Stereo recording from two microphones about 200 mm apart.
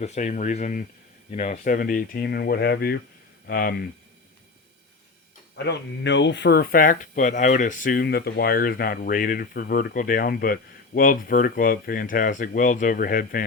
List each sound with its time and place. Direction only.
0.0 s speech: 35° left (ahead or behind)
5.6 s speech: 60° left (ahead or behind); by 13.4 s 45° left (ahead or behind)